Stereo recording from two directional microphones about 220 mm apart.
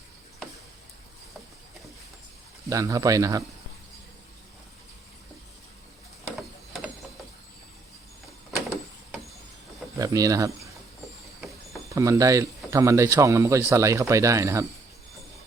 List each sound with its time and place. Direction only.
2.6 s speech: 15° right (ahead or behind)
6.3 s ratchet: centre (ahead or behind)
10.0 s speech: 15° right (ahead or behind)
11.3 s vehicle: centre (ahead or behind)
11.9 s speech: 15° right (ahead or behind)